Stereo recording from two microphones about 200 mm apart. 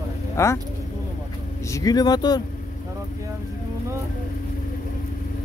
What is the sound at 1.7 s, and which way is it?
Speech, 15° left (ahead or behind).